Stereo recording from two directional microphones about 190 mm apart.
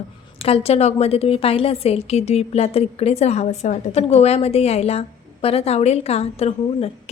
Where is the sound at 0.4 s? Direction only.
30° left (ahead or behind).